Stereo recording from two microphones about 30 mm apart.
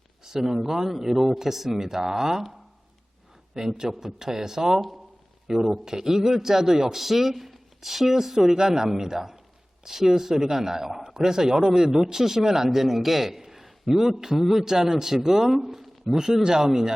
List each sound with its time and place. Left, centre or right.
0.3 s speech: centre
3.8 s a man's voice: centre